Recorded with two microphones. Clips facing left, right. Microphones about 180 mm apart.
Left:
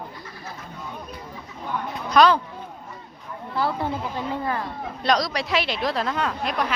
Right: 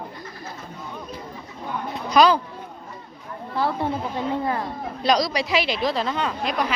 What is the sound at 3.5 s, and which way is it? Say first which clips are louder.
Sheep: right 1 dB; 25° right (ahead or behind).